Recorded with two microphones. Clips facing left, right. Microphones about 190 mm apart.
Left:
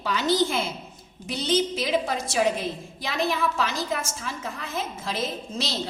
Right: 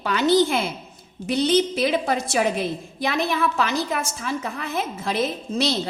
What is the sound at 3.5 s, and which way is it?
A woman's voice, 60° right (ahead or behind).